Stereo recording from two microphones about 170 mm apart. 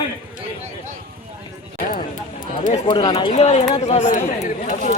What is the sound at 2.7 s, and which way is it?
Speech, 25° left (ahead or behind).